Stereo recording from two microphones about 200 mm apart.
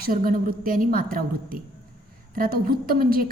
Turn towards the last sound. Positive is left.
turn(degrees=-45)  # may be behind; listen again after turning